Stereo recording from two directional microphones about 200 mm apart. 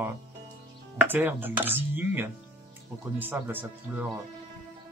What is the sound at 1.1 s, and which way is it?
Speech, 10° right (ahead or behind).